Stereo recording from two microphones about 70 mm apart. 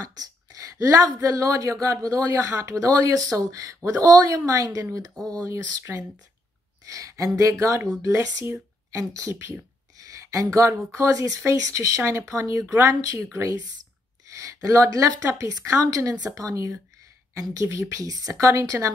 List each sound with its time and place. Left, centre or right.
0.0 s speech: right
5.1 s speech: centre
5.4 s speech: right